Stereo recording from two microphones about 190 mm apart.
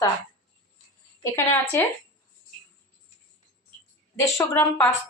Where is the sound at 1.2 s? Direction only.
15° left (ahead or behind).